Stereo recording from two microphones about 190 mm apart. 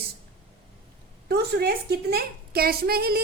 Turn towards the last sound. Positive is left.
turn(degrees=-55)  # may be behind; listen again after turning